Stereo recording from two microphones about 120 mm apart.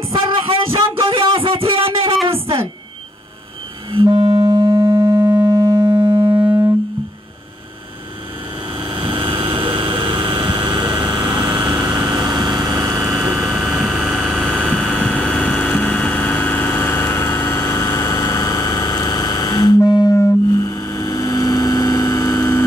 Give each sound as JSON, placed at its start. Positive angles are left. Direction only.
{"t": 0.1, "sound": "music", "side_deg": -50}
{"t": 3.9, "sound": "music", "side_deg": -40}
{"t": 8.7, "sound": "vehicle", "side_deg": -45}
{"t": 13.3, "sound": "vehicle", "side_deg": 0}
{"t": 14.7, "sound": "vehicle", "side_deg": 10}